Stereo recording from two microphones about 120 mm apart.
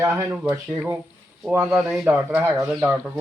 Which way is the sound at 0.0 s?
20° right (ahead or behind).